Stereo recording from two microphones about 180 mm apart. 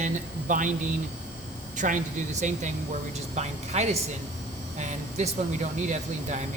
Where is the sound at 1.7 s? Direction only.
45° right (ahead or behind).